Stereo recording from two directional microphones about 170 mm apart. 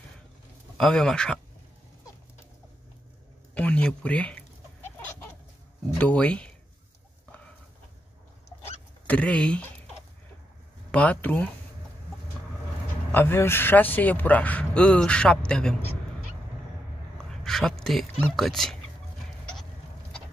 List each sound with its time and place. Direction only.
0.7 s speech: centre (ahead or behind)
3.5 s speech: 10° left (ahead or behind)
5.9 s a man's voice: 10° left (ahead or behind)
9.0 s a man's voice: 10° left (ahead or behind)
10.9 s a man's voice: 10° left (ahead or behind)
13.1 s a man's voice: 15° left (ahead or behind)
17.3 s speech: centre (ahead or behind)